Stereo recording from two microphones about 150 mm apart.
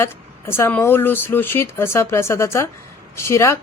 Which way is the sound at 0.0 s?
15° left (ahead or behind).